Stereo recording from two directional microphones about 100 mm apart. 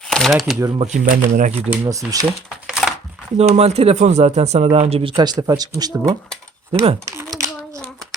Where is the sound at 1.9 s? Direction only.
35° right (ahead or behind).